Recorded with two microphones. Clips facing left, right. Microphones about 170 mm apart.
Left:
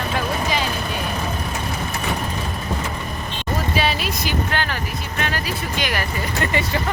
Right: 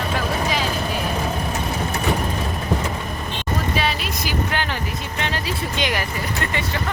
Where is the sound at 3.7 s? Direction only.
5° left (ahead or behind).